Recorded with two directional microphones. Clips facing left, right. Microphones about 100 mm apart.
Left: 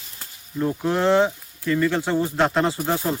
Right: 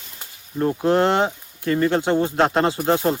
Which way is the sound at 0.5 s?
40° right (ahead or behind).